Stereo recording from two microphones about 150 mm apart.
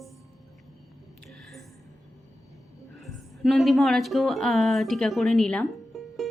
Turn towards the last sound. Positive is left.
turn(degrees=0)  # may be behind; listen again after turning